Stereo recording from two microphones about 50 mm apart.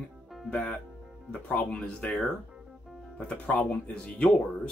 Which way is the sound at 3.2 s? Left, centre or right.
Left.